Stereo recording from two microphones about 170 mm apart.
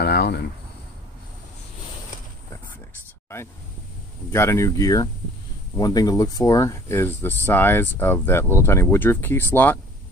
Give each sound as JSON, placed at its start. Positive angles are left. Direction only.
{"t": 0.0, "sound": "cricket", "side_deg": 75}
{"t": 4.3, "sound": "speech", "side_deg": 15}